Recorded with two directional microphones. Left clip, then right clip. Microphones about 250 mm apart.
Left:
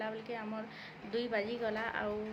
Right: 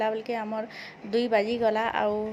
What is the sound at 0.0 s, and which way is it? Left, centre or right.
A woman's voice, right.